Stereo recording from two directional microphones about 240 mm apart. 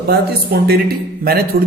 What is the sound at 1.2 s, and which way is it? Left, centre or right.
Speech, right.